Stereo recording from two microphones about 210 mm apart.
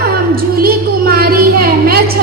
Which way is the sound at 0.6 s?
45° right (ahead or behind).